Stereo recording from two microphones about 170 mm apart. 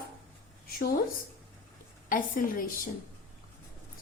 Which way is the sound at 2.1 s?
55° left (ahead or behind).